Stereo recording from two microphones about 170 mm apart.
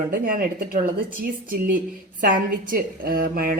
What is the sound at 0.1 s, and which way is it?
A woman's voice, 55° right (ahead or behind).